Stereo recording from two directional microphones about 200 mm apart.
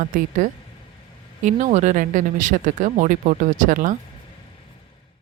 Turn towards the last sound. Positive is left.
turn(degrees=-40)  # may be behind; listen again after turning